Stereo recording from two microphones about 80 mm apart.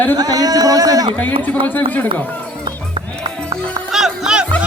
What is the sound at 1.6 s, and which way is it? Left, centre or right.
Speech, left.